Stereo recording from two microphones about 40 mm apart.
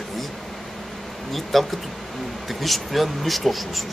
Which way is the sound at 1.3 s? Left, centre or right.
Centre.